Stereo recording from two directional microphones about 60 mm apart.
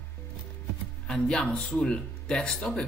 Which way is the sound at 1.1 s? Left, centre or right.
Centre.